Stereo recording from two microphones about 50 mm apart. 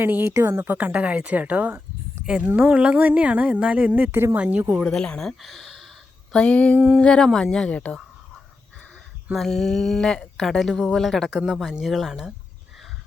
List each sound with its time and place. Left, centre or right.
0.0 s a woman's voice: right
0.3 s a woman's voice: right
0.6 s speech: right
0.9 s speech: right
4.1 s speech: right
4.4 s speech: right
4.9 s a woman's voice: centre
5.4 s speech: centre
6.3 s a sound: left
9.3 s a woman's voice: centre
11.3 s speech: centre